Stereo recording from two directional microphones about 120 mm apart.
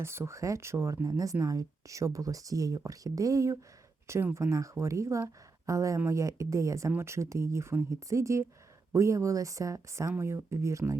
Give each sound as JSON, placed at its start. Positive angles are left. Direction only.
{"t": 0.0, "sound": "speech", "side_deg": -20}